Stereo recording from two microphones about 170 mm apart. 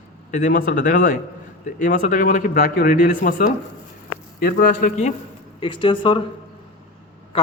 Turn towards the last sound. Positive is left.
turn(degrees=30)  # may be behind; listen again after turning